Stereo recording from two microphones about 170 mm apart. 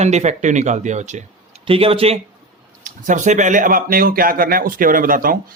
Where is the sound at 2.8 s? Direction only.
50° right (ahead or behind).